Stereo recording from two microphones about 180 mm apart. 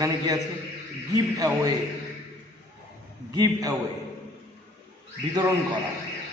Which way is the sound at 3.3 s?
20° right (ahead or behind).